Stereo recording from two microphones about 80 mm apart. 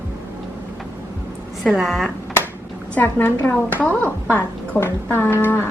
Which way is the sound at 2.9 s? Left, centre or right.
Left.